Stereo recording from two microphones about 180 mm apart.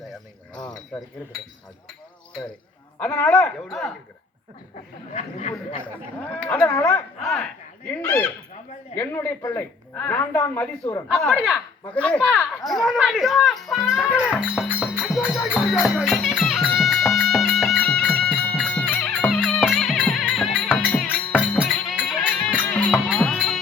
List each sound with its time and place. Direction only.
0.6 s wind chime: 20° left (ahead or behind)
3.0 s speech: 5° left (ahead or behind)
5.1 s speech: 40° left (ahead or behind)
6.4 s speech: 10° left (ahead or behind)
14.9 s music: centre (ahead or behind)
15.5 s speech: centre (ahead or behind)
16.8 s music: centre (ahead or behind)